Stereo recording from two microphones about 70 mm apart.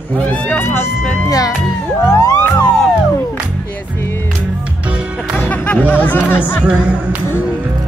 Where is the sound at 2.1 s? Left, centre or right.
Left.